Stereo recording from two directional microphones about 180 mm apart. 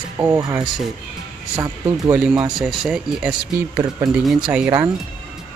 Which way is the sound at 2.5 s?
Centre (ahead or behind).